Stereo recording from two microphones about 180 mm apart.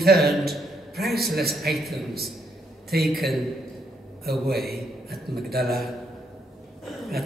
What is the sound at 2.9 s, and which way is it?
Speech, 60° right (ahead or behind).